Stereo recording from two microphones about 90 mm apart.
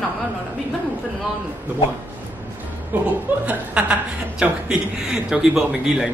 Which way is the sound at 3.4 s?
15° right (ahead or behind).